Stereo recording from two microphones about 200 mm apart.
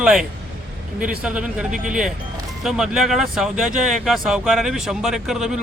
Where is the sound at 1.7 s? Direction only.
40° right (ahead or behind).